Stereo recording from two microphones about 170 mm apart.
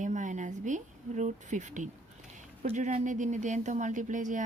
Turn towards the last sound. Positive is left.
turn(degrees=-45)  # may be behind; listen again after turning